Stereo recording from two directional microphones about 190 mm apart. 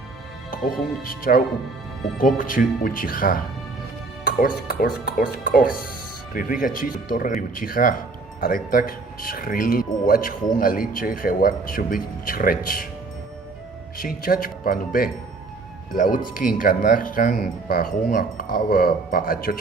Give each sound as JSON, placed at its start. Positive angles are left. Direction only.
{"t": 1.0, "sound": "speech", "side_deg": 50}
{"t": 14.0, "sound": "speech", "side_deg": 45}